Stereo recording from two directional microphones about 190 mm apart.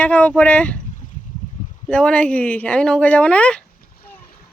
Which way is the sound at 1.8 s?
5° left (ahead or behind).